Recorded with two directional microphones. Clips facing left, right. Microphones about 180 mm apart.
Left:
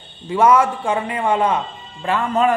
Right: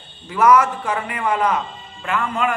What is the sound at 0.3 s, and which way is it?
A man's voice, 25° left (ahead or behind).